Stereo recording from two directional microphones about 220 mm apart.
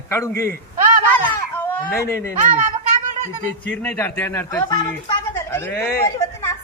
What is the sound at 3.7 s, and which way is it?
A man's voice, 5° left (ahead or behind).